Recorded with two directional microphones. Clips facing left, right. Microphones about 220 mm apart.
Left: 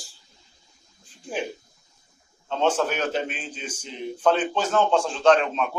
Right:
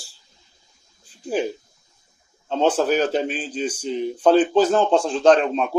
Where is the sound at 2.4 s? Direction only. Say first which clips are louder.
Right 4 dB; 35° right (ahead or behind).